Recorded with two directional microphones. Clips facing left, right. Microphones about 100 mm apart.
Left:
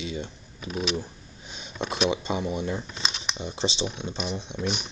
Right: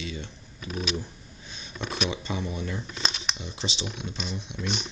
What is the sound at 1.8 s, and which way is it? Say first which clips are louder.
Speech: left 5 dB; 25° left (ahead or behind).